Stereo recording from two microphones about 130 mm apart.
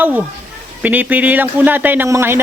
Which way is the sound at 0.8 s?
15° right (ahead or behind).